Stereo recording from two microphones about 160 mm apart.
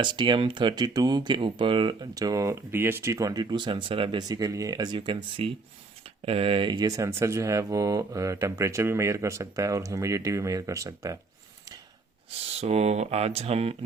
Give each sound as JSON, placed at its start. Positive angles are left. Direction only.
{"t": 0.0, "sound": "speech", "side_deg": -30}
{"t": 12.5, "sound": "speech", "side_deg": -40}